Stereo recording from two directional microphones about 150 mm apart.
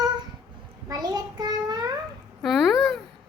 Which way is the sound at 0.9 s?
25° right (ahead or behind).